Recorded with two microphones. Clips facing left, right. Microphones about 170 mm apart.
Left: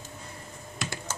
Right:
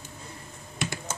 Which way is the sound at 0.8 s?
20° right (ahead or behind).